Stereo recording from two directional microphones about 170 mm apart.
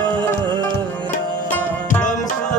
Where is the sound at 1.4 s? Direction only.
10° left (ahead or behind).